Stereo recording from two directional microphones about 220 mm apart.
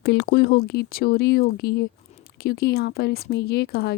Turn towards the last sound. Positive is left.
turn(degrees=45)  # may be behind; listen again after turning